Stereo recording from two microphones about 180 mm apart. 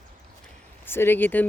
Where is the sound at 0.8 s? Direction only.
10° left (ahead or behind).